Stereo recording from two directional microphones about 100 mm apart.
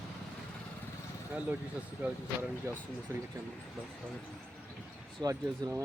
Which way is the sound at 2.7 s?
30° right (ahead or behind).